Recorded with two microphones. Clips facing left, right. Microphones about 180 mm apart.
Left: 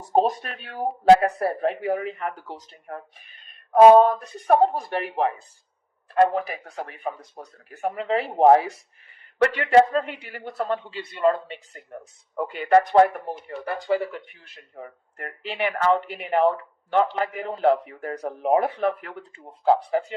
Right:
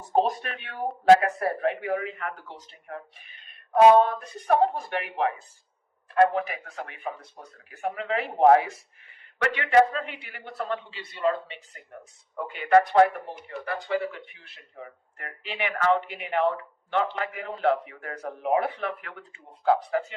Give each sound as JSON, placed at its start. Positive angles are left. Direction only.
{"t": 0.1, "sound": "speech", "side_deg": 35}